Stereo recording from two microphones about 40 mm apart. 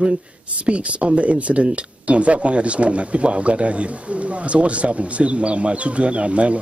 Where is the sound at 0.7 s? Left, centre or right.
Right.